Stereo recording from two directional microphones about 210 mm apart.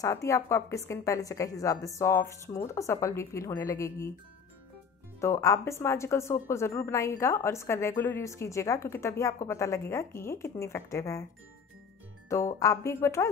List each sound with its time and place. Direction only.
0.0 s a woman's voice: 15° left (ahead or behind)
5.2 s a woman's voice: 15° left (ahead or behind)
12.3 s a woman's voice: 15° left (ahead or behind)